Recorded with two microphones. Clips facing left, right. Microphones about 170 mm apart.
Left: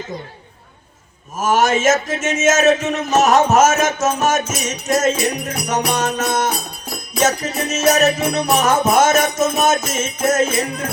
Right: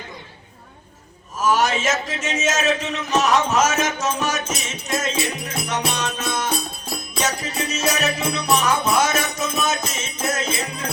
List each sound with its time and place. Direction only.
1.4 s music: 45° left (ahead or behind)